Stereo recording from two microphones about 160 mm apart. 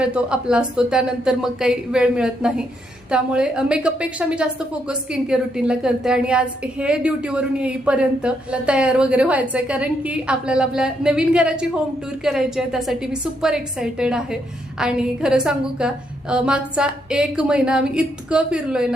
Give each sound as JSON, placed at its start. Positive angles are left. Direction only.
{"t": 0.0, "sound": "a woman's voice", "side_deg": -5}